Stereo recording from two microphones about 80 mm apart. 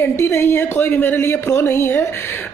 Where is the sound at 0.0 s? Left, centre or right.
Left.